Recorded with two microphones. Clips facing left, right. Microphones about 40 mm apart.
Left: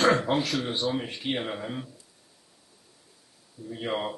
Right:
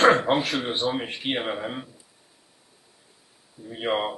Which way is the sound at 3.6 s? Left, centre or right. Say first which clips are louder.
Right 4 dB; right.